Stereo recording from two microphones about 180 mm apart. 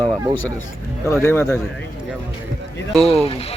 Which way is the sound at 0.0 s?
20° right (ahead or behind).